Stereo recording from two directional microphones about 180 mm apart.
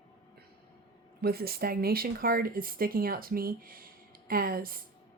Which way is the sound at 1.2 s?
60° right (ahead or behind).